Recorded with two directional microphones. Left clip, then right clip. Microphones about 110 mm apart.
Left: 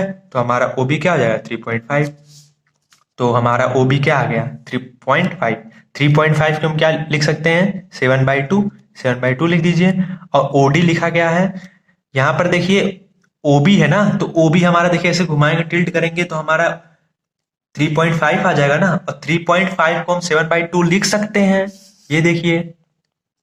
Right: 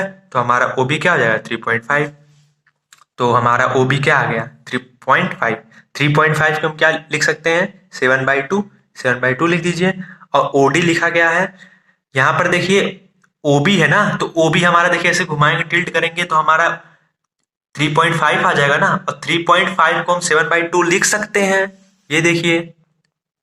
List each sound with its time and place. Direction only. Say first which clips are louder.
0.0 s speech: right 1 dB; 30° left (ahead or behind)
2.9 s a man's voice: right 2 dB; 40° left (ahead or behind)